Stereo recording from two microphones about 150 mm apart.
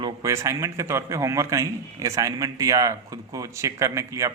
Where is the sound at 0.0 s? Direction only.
20° right (ahead or behind).